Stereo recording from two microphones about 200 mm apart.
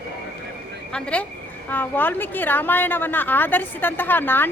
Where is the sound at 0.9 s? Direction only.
5° left (ahead or behind).